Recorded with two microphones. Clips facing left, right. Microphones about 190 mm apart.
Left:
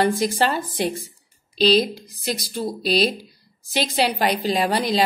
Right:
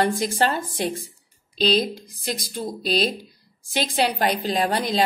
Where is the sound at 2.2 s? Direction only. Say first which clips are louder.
Left 3 dB; centre (ahead or behind).